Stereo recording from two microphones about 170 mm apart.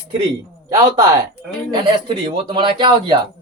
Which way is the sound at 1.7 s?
25° right (ahead or behind).